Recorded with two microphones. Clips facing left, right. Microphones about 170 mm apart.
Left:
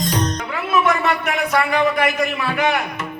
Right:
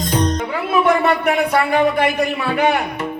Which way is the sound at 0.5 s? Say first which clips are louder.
Right 2 dB; 30° right (ahead or behind).